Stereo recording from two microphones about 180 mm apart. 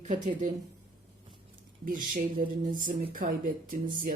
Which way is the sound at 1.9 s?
50° right (ahead or behind).